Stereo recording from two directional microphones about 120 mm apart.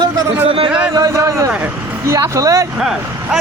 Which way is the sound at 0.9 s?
25° right (ahead or behind).